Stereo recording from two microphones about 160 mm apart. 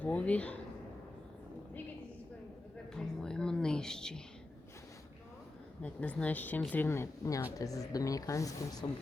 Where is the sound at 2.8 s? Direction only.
5° left (ahead or behind).